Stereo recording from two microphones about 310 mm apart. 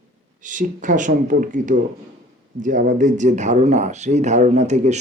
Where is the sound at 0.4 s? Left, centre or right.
Right.